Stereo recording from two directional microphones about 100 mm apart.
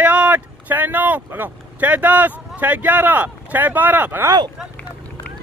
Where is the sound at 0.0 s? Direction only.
15° right (ahead or behind).